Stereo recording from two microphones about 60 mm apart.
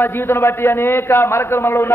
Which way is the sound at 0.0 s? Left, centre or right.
Left.